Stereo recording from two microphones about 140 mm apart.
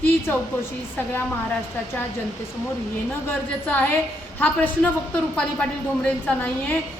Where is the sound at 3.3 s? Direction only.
15° left (ahead or behind).